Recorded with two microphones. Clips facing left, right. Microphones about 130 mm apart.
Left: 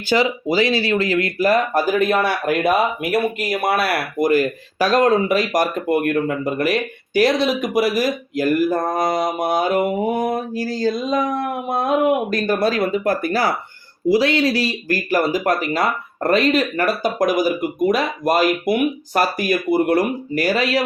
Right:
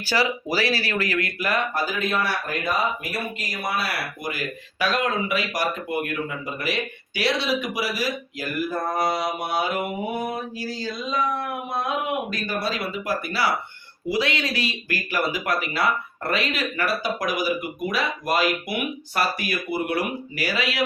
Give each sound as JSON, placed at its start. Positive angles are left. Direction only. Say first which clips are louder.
{"t": 0.1, "sound": "speech", "louder": "left 6 dB", "side_deg": 20}
{"t": 14.1, "sound": "speech", "louder": "left 9 dB", "side_deg": 35}